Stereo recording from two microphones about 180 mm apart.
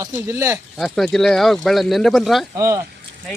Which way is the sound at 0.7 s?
Centre (ahead or behind).